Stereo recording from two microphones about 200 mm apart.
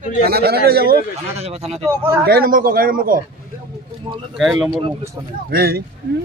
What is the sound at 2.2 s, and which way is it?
Speech, 50° right (ahead or behind).